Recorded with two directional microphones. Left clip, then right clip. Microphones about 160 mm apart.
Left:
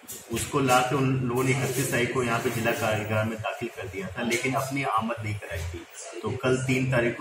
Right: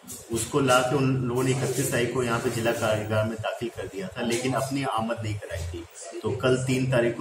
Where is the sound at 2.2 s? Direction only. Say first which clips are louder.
Even; 40° right (ahead or behind).